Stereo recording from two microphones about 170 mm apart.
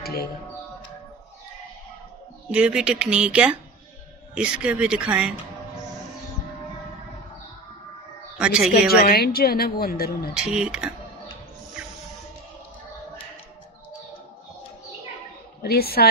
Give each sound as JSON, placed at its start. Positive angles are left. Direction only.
{"t": 0.0, "sound": "music", "side_deg": 65}
{"t": 2.5, "sound": "speech", "side_deg": -5}
{"t": 8.4, "sound": "speech", "side_deg": -5}
{"t": 9.0, "sound": "a woman's voice", "side_deg": 65}
{"t": 10.3, "sound": "speech", "side_deg": -5}
{"t": 15.6, "sound": "a woman's voice", "side_deg": 65}